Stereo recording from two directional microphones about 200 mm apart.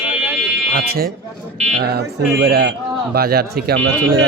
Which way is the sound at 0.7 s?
50° right (ahead or behind).